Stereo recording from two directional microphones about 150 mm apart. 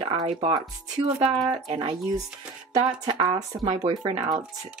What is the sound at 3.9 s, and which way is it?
Speech, 35° right (ahead or behind).